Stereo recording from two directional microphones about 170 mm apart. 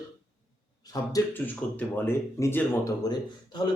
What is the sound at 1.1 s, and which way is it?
Speech, 10° left (ahead or behind).